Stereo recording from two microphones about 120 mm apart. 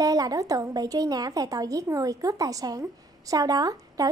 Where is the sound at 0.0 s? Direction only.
30° right (ahead or behind).